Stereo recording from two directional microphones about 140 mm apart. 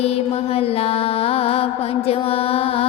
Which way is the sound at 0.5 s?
45° left (ahead or behind).